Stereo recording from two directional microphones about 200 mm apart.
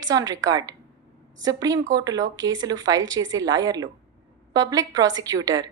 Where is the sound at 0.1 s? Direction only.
20° right (ahead or behind).